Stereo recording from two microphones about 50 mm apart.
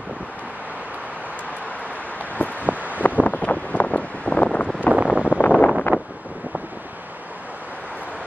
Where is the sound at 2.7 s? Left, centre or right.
Right.